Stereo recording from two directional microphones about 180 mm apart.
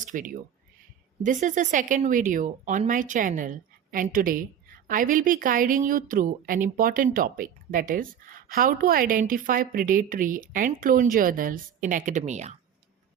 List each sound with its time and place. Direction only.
0.0 s speech: 45° right (ahead or behind)